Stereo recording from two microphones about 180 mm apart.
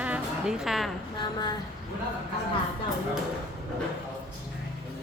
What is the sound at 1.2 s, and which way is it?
Speech, 25° left (ahead or behind).